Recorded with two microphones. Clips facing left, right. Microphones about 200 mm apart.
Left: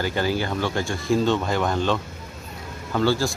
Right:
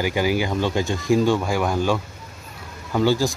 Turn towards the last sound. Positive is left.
turn(degrees=-15)  # may be behind; listen again after turning